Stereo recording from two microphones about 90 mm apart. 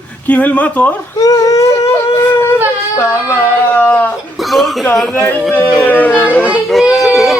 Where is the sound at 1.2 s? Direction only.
40° left (ahead or behind).